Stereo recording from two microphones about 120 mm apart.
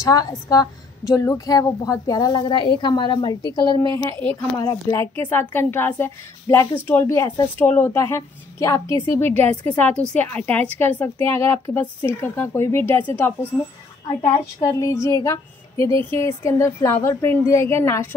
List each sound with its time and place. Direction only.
0.0 s a woman's voice: 30° left (ahead or behind)
14.2 s a woman's voice: 25° left (ahead or behind)